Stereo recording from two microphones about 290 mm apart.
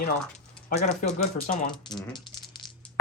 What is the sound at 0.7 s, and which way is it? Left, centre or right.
Speech, left.